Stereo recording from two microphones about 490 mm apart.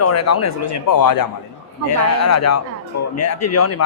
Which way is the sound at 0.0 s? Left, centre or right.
Left.